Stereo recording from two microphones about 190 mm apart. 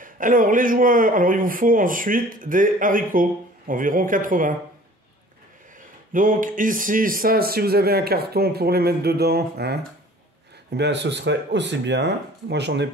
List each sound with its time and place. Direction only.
0.0 s speech: 45° right (ahead or behind)
6.1 s speech: 45° right (ahead or behind); by 12.8 s 65° right (ahead or behind)